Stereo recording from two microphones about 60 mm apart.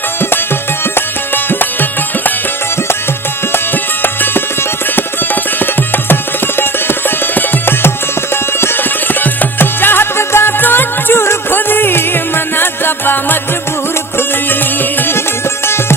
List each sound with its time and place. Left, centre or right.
1.5 s music: left
4.0 s music: left
4.9 s tabla: left
7.3 s music: left